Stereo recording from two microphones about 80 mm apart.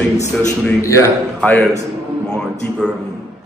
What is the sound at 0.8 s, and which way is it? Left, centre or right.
Speech, left.